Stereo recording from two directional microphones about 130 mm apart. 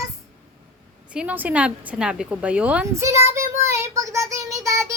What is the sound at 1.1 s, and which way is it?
A woman's voice, 10° right (ahead or behind).